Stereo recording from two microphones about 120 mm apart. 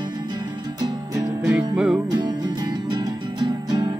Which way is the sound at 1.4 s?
10° right (ahead or behind).